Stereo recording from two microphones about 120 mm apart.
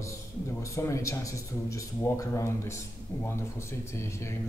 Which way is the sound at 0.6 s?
25° left (ahead or behind).